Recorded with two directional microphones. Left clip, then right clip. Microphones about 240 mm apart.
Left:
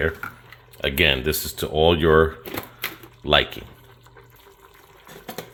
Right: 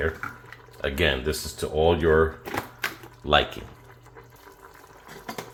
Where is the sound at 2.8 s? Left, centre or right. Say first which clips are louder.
Even; left.